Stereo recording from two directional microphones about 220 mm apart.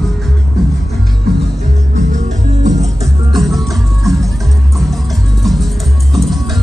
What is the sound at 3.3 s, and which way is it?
Music, centre (ahead or behind).